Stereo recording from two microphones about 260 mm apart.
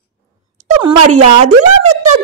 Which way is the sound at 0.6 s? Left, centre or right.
Right.